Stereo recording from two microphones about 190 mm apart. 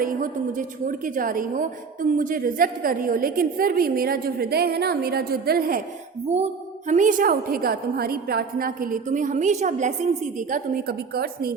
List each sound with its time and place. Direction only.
0.0 s a woman's voice: 45° right (ahead or behind)
6.3 s a woman's voice: 35° right (ahead or behind); by 11.5 s 55° right (ahead or behind)